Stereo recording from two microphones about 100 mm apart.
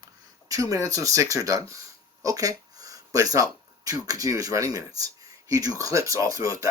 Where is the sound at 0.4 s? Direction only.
35° right (ahead or behind).